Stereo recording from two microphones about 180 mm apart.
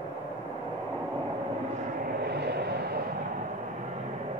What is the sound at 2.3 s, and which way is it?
Vehicle, 65° right (ahead or behind).